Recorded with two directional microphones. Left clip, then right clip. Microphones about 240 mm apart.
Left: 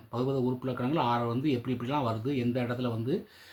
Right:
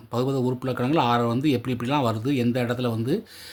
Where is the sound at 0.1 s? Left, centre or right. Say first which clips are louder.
Right 5 dB; right.